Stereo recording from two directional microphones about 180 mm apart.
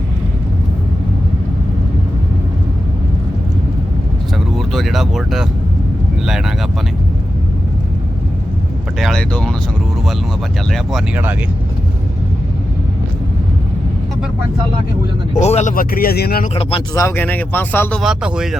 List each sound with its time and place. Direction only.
4.5 s a sound: centre (ahead or behind)
9.0 s speech: centre (ahead or behind)
10.7 s speech: 5° right (ahead or behind)
15.4 s speech: 35° left (ahead or behind)
15.7 s speech: 55° left (ahead or behind)
16.9 s speech: 15° left (ahead or behind)
18.0 s speech: 5° right (ahead or behind)